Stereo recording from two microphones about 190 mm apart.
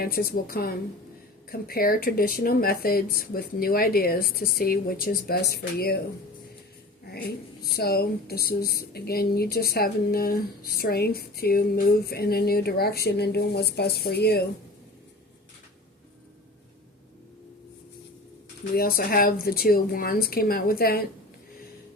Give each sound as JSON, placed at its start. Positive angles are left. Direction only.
{"t": 0.0, "sound": "speech", "side_deg": 50}
{"t": 7.8, "sound": "speech", "side_deg": 55}
{"t": 18.7, "sound": "speech", "side_deg": 50}